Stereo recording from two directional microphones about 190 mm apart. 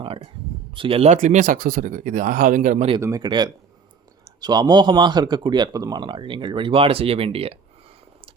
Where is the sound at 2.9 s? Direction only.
20° right (ahead or behind).